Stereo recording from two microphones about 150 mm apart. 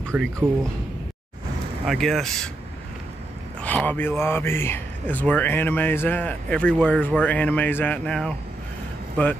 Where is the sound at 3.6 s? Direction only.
10° left (ahead or behind).